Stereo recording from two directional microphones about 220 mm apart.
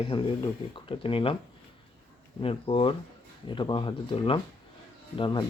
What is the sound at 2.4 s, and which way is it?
Speech, 25° left (ahead or behind).